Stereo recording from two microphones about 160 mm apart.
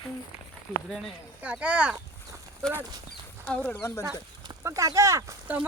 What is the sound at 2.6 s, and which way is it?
Speech, 5° left (ahead or behind).